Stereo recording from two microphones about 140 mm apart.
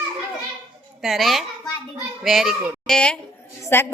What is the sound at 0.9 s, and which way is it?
A woman's voice, centre (ahead or behind).